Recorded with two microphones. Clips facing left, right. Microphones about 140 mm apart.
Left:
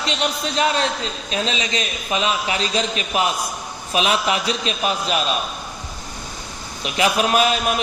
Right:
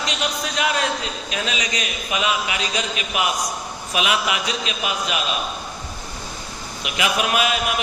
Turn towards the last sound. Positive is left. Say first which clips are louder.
# left 3 dB
turn(degrees=35)  # may be behind; listen again after turning